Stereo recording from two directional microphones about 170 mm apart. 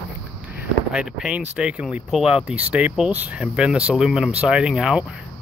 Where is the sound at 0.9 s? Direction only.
5° right (ahead or behind).